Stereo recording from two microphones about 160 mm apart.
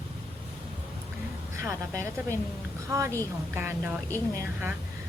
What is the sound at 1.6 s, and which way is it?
A woman's voice, 20° right (ahead or behind).